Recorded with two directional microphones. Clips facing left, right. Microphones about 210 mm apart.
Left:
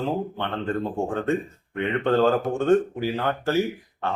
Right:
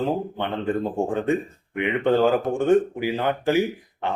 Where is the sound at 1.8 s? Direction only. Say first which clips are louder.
Right 1 dB; 15° right (ahead or behind).